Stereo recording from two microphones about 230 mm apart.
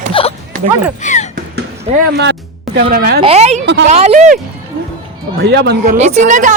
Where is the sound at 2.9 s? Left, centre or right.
Right.